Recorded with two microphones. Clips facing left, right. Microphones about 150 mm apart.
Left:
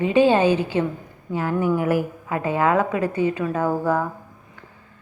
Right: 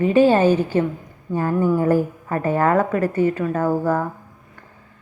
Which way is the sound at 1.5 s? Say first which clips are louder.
Right 3 dB; 15° left (ahead or behind).